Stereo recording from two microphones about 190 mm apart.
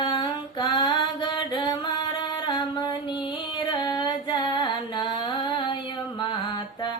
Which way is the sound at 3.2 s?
25° left (ahead or behind).